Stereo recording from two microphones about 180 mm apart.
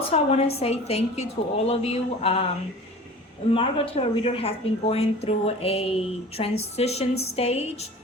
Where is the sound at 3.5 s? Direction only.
30° left (ahead or behind).